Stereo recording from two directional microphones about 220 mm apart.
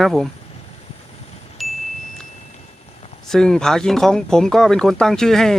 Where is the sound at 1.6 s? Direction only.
Centre (ahead or behind).